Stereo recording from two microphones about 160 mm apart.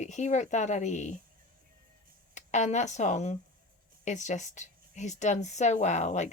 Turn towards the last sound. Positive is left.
turn(degrees=45)  # may be behind; listen again after turning